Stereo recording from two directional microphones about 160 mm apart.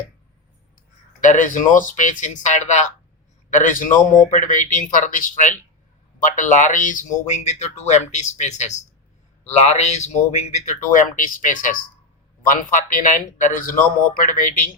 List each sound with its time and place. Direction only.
1.2 s speech: 50° left (ahead or behind)